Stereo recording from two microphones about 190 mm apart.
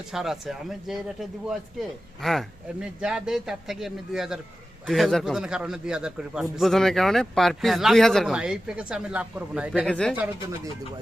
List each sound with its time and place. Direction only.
0.1 s a man's voice: centre (ahead or behind)
9.9 s a man's voice: 5° left (ahead or behind)